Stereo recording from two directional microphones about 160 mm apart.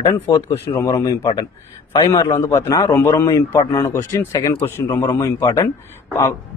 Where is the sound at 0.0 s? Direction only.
25° left (ahead or behind).